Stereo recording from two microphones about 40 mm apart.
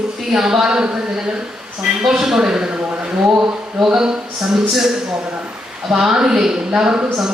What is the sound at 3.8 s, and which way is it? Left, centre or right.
Speech, centre.